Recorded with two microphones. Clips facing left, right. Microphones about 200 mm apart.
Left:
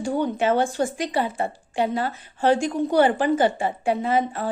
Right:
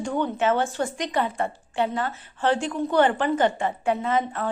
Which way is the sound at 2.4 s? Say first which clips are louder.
Left 3 dB; 10° left (ahead or behind).